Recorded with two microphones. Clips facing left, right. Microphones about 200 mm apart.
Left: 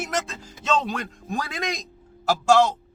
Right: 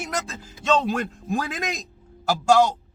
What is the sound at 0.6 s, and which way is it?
Speech, centre (ahead or behind).